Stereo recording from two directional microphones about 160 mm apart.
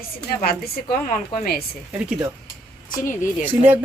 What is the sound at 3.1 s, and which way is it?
Speech, 55° left (ahead or behind).